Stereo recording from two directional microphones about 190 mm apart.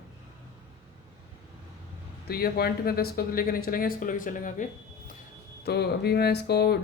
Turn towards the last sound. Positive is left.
turn(degrees=60)  # may be behind; listen again after turning